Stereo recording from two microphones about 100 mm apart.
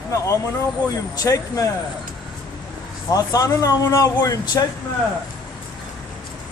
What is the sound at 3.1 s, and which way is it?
Speech, 35° left (ahead or behind).